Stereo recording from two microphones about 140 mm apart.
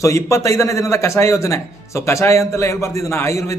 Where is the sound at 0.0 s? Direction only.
20° left (ahead or behind).